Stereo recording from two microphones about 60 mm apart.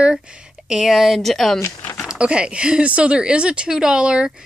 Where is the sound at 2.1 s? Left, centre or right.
Centre.